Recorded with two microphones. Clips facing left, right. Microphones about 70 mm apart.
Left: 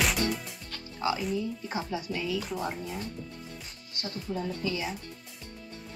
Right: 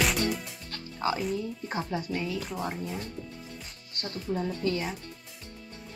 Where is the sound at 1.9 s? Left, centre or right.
Right.